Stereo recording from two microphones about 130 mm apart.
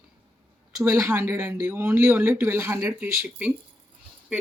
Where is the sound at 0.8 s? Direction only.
25° right (ahead or behind).